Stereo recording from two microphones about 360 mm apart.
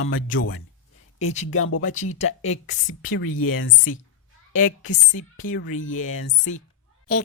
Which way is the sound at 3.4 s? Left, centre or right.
Left.